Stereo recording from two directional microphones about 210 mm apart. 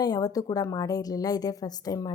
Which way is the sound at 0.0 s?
20° left (ahead or behind).